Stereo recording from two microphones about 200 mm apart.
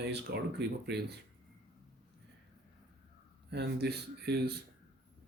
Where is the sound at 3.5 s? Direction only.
55° right (ahead or behind).